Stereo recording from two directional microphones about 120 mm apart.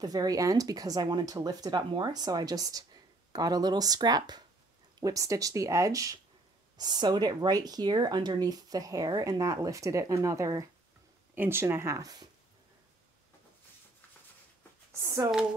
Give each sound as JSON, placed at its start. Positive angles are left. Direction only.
{"t": 0.0, "sound": "speech", "side_deg": -30}
{"t": 15.0, "sound": "speech", "side_deg": -25}